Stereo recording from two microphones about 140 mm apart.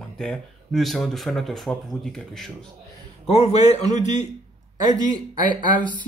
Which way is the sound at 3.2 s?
45° left (ahead or behind).